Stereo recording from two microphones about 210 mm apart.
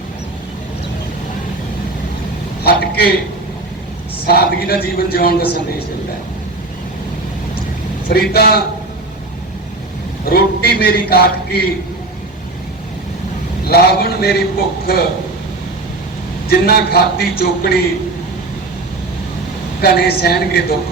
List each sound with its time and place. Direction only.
2.6 s a man's voice: 45° left (ahead or behind)
4.3 s a man's voice: 50° left (ahead or behind)
8.3 s a man's voice: 50° left (ahead or behind)
10.2 s a man's voice: 45° left (ahead or behind)
13.7 s a man's voice: 50° left (ahead or behind)
16.5 s a man's voice: 45° left (ahead or behind)
19.8 s a man's voice: 45° left (ahead or behind)